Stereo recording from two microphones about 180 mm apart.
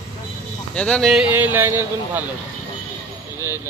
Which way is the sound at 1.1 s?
10° right (ahead or behind).